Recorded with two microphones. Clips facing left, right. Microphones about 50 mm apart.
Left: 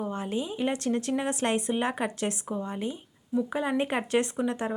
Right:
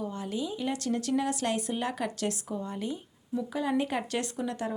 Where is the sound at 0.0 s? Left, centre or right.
Left.